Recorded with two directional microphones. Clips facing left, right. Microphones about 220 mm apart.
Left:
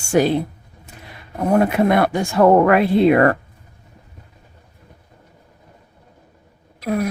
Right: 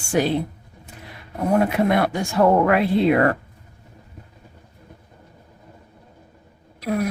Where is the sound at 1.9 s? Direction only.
55° left (ahead or behind).